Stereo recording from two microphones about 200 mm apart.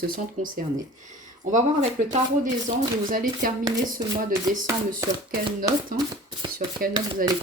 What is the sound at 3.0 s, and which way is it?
Speech, 45° right (ahead or behind).